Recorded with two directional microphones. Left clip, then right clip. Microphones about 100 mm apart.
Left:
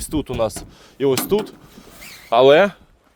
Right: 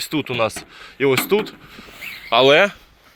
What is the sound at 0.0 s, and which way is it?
Speech, 50° left (ahead or behind).